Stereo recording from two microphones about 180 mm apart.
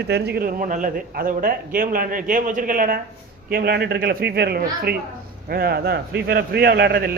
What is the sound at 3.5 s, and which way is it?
A man's voice, 65° right (ahead or behind).